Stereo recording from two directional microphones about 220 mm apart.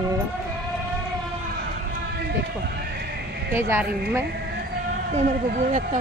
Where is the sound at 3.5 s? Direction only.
10° right (ahead or behind).